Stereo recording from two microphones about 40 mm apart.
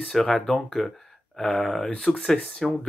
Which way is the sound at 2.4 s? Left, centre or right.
Centre.